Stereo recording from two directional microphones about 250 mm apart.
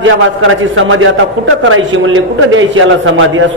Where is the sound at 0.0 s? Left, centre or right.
Right.